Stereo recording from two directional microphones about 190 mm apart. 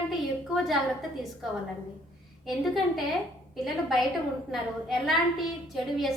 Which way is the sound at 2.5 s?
Centre (ahead or behind).